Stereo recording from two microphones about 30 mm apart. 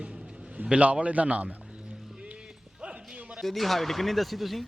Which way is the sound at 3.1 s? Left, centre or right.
Right.